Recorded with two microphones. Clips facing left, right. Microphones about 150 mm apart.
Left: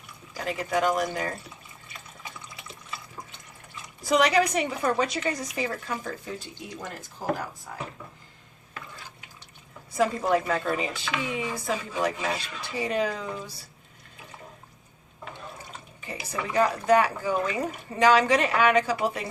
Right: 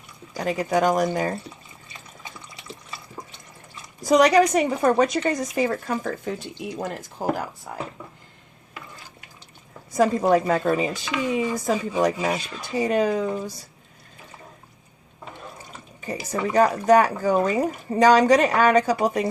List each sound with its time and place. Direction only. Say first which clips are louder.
0.3 s speech: right 5 dB; 40° right (ahead or behind)
4.0 s a woman's voice: right 6 dB; 40° right (ahead or behind)
10.2 s a woman's voice: right 6 dB; 40° right (ahead or behind)
16.0 s speech: right 7 dB; 40° right (ahead or behind)